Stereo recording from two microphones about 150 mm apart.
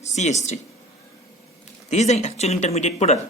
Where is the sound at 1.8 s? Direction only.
50° left (ahead or behind).